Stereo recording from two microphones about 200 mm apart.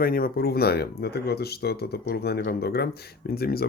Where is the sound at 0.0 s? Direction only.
45° left (ahead or behind).